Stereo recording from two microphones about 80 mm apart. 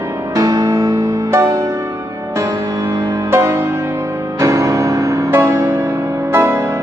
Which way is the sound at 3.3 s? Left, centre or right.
Right.